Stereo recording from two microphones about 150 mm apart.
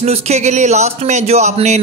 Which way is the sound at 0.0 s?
45° right (ahead or behind).